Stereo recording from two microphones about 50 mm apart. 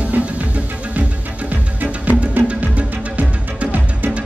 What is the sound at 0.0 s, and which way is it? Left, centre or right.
Music, right.